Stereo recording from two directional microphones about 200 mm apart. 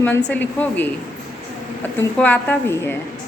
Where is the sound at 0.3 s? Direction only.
10° left (ahead or behind).